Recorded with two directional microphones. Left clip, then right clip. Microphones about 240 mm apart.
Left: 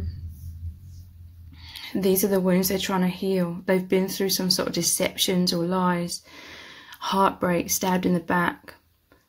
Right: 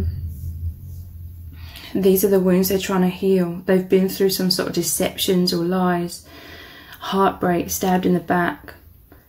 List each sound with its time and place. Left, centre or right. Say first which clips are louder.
1.7 s speech: right 6 dB; left